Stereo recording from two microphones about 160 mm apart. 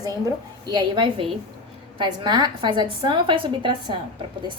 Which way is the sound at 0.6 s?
30° right (ahead or behind).